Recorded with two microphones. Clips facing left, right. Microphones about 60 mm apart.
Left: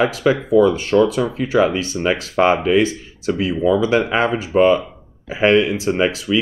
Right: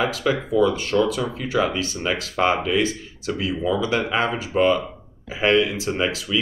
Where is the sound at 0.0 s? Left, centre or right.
Left.